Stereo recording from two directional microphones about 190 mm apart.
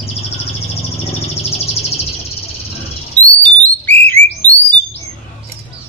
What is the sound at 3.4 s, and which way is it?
Bird, 10° left (ahead or behind).